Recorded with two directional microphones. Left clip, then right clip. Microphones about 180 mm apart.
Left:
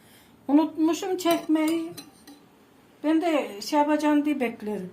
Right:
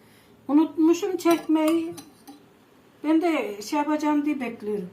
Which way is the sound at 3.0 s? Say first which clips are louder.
Right 1 dB; 45° left (ahead or behind).